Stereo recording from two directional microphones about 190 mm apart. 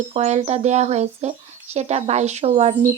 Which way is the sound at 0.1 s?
35° right (ahead or behind).